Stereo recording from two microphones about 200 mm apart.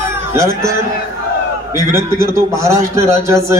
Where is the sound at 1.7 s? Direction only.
15° right (ahead or behind).